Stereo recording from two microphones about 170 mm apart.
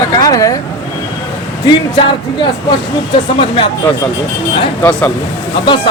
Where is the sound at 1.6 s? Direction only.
30° left (ahead or behind).